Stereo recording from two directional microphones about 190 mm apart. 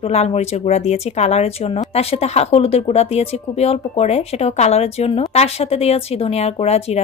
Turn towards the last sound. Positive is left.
turn(degrees=35)  # may be behind; listen again after turning